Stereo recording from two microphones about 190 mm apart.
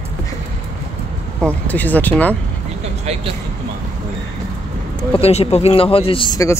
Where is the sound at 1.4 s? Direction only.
10° left (ahead or behind).